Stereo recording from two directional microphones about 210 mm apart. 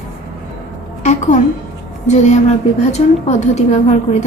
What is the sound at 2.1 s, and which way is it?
A woman's voice, 35° left (ahead or behind).